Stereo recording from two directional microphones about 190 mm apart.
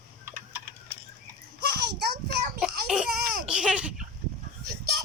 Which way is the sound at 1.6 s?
55° right (ahead or behind).